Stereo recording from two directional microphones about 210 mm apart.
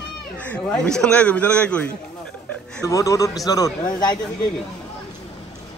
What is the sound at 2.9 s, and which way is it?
Speech, 15° left (ahead or behind).